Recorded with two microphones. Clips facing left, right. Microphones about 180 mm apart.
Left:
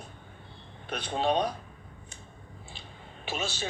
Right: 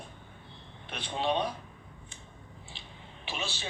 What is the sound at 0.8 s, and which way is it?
Speech, 45° left (ahead or behind).